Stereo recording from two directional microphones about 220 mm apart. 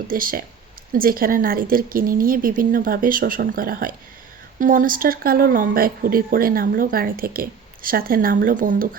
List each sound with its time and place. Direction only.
0.1 s speech: 40° right (ahead or behind)